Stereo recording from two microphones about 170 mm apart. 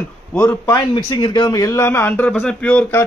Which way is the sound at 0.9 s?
25° left (ahead or behind).